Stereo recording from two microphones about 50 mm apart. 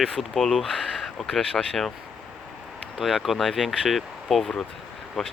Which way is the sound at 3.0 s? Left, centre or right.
Centre.